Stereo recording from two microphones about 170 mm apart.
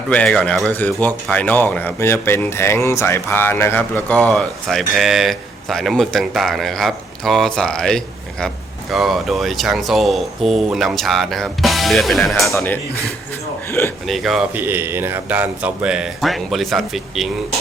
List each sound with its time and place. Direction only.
0.1 s speech: 5° left (ahead or behind)
14.1 s speech: centre (ahead or behind)